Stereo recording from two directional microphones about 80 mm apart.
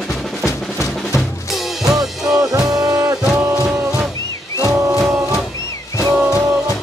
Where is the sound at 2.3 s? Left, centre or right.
Right.